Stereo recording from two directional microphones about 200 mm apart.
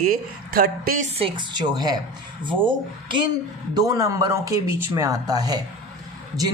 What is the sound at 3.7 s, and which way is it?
Speech, 20° right (ahead or behind).